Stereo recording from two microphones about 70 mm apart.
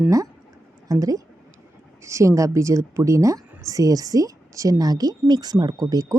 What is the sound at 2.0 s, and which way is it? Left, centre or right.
A woman's voice, right.